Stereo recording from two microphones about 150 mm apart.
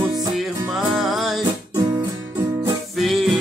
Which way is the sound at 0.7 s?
5° right (ahead or behind).